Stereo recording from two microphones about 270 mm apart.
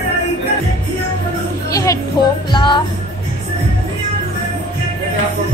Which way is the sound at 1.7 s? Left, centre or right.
Centre.